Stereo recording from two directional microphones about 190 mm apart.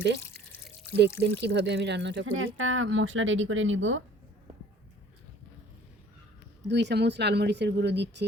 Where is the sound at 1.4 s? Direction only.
65° right (ahead or behind); by 4.0 s 90° right.